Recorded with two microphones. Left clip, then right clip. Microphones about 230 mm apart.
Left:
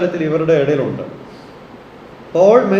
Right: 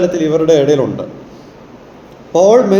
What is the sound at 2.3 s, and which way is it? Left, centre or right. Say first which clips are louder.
Speech: right 2 dB; right.